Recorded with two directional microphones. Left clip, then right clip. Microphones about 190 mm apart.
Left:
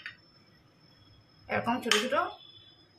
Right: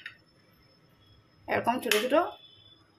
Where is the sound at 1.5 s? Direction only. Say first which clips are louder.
Right 1 dB; 35° right (ahead or behind).